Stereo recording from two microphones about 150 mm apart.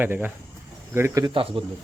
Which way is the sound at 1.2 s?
35° right (ahead or behind).